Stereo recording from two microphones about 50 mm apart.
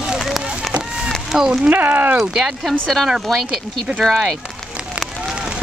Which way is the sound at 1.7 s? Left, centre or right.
Right.